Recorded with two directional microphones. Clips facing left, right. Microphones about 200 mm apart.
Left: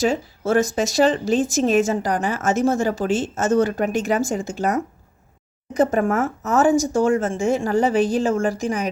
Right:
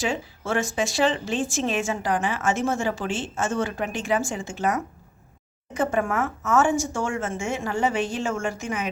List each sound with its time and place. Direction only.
0.0 s a woman's voice: 40° left (ahead or behind)